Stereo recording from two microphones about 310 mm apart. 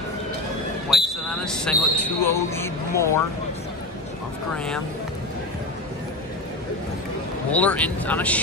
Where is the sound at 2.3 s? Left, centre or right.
Centre.